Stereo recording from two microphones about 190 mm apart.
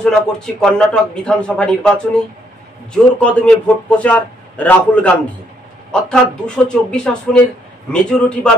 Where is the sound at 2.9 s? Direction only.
5° left (ahead or behind).